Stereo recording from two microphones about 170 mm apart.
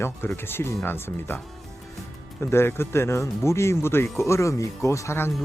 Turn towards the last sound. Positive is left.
turn(degrees=15)  # may be behind; listen again after turning